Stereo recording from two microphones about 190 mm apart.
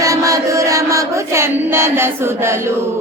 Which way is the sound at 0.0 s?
15° right (ahead or behind).